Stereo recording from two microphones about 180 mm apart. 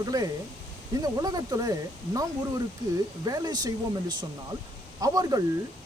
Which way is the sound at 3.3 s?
20° right (ahead or behind).